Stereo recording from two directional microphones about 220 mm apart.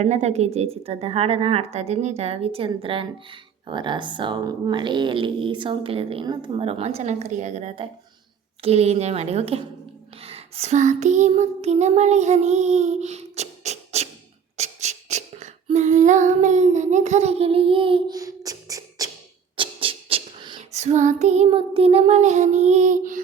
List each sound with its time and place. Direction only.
0.0 s speech: 30° right (ahead or behind)
10.2 s a sound: 25° right (ahead or behind)
14.5 s humming: 30° right (ahead or behind)
19.5 s female singing: 25° right (ahead or behind)